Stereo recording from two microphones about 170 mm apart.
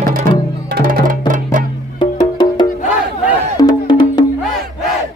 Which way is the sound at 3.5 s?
25° left (ahead or behind).